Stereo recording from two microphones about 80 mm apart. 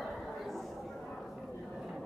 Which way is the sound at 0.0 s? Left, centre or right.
Centre.